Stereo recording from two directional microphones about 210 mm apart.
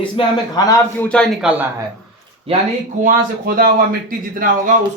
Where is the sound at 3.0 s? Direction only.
40° right (ahead or behind).